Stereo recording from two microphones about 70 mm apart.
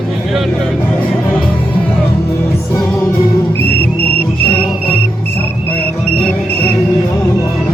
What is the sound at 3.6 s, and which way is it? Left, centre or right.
Whistle, left.